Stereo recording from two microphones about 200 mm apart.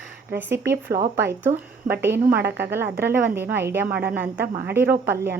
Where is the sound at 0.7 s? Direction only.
50° right (ahead or behind).